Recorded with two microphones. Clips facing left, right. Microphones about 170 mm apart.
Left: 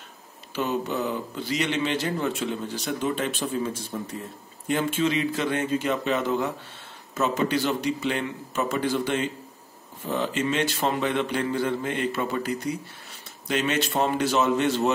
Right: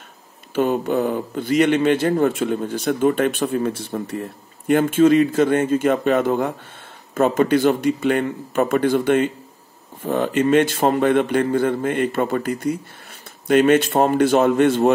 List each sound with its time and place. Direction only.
0.6 s a man's voice: 50° right (ahead or behind)